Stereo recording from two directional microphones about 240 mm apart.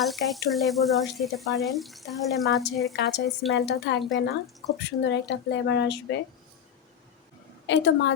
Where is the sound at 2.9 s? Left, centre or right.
Left.